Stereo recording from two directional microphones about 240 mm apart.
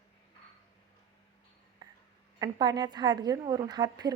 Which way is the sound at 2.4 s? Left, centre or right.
Centre.